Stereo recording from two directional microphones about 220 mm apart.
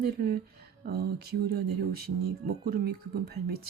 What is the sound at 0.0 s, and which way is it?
Speech, 45° right (ahead or behind).